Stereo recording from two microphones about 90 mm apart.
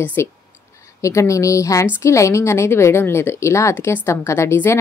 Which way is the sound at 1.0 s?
35° left (ahead or behind).